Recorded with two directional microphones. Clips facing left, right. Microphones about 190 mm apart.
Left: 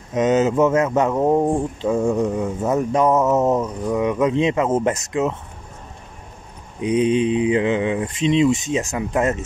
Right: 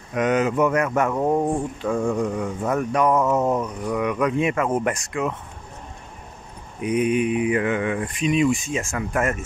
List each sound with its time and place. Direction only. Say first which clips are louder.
0.1 s speech: left 4 dB; 25° left (ahead or behind)
6.8 s speech: left 3 dB; 25° left (ahead or behind)